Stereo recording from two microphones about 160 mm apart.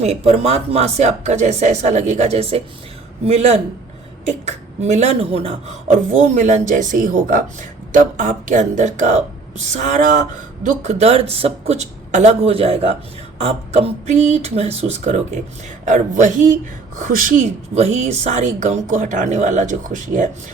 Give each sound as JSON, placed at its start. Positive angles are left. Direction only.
{"t": 0.0, "sound": "a man's voice", "side_deg": -40}